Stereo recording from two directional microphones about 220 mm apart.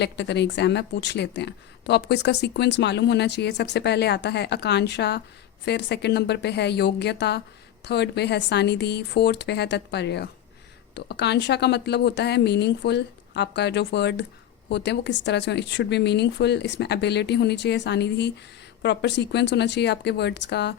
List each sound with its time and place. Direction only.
0.0 s a woman's voice: 50° left (ahead or behind)